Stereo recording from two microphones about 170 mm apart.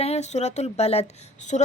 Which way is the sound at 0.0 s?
40° left (ahead or behind).